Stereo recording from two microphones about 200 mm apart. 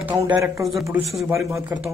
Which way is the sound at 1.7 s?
10° right (ahead or behind).